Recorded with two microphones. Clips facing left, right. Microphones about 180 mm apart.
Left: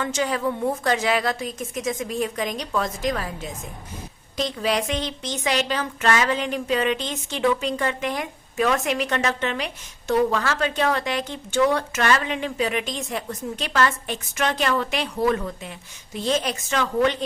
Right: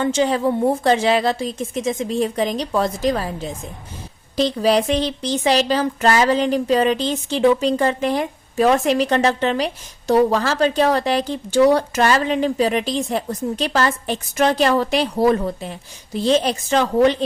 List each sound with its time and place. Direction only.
0.0 s a woman's voice: 30° right (ahead or behind)